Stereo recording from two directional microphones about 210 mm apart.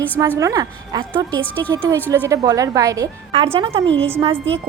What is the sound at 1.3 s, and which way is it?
Speech, 5° left (ahead or behind).